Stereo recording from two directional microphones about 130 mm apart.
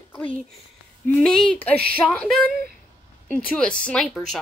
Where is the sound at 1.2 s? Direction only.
5° left (ahead or behind).